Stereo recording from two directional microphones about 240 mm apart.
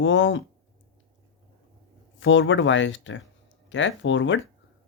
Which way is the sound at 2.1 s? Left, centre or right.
Left.